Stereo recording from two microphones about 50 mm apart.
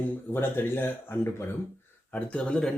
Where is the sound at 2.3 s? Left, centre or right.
Centre.